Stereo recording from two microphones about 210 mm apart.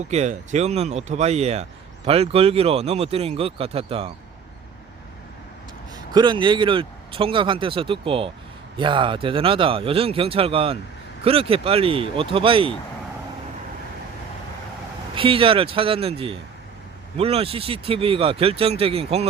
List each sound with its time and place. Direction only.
0.1 s speech: 35° right (ahead or behind)
6.1 s speech: 20° right (ahead or behind)
15.1 s speech: 25° right (ahead or behind)